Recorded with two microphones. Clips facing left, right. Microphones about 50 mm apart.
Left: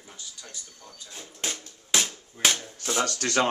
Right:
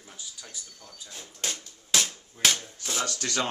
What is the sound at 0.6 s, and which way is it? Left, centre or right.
Speech, centre.